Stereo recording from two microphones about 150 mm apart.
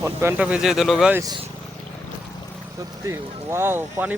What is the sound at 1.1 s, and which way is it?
Speech, 20° right (ahead or behind).